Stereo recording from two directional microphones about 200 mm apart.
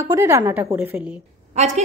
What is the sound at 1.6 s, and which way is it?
Speech, 35° right (ahead or behind).